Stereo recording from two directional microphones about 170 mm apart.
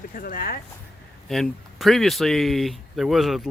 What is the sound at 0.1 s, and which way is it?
Speech, 55° left (ahead or behind).